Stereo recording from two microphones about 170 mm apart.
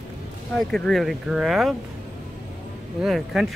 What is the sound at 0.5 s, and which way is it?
Speech, 5° left (ahead or behind).